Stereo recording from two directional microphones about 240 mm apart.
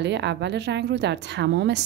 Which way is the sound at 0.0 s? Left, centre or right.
Right.